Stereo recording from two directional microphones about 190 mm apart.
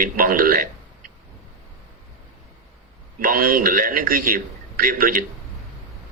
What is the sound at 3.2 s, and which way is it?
A man's voice, 50° right (ahead or behind).